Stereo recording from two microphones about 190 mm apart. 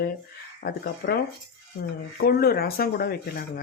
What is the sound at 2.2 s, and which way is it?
Speech, 55° left (ahead or behind).